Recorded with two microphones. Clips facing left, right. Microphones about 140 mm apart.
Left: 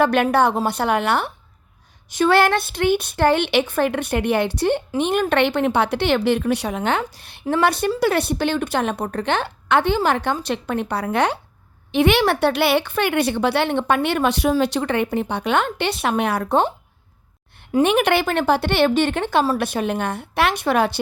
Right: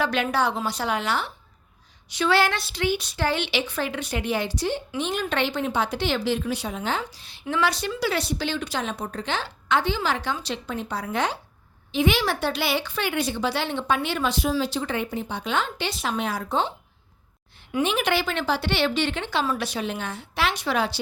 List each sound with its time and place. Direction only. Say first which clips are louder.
0.0 s a woman's voice: left 7 dB; 55° left (ahead or behind)
17.8 s a woman's voice: left 6 dB; 60° left (ahead or behind)